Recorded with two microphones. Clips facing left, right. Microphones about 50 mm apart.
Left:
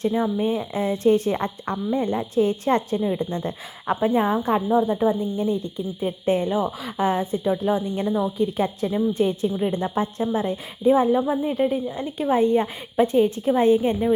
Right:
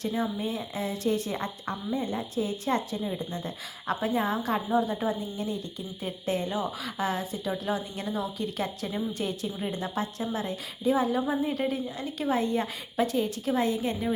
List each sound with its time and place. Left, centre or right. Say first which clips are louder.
0.0 s a woman's voice: left 8 dB; left
4.0 s speech: left 8 dB; left
4.7 s speech: left 7 dB; centre; by 7.5 s left
7.5 s speech: left 7 dB; centre
11.3 s speech: left 6 dB; centre